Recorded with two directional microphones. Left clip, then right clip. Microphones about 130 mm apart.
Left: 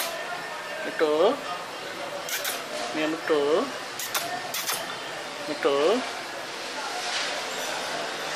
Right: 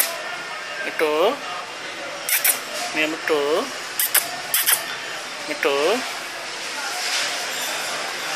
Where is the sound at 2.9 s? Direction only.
10° left (ahead or behind).